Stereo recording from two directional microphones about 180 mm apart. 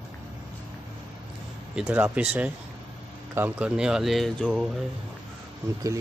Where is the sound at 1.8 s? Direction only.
10° right (ahead or behind).